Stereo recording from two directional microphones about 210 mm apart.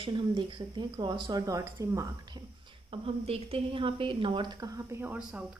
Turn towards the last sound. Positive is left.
turn(degrees=-10)  # may be behind; listen again after turning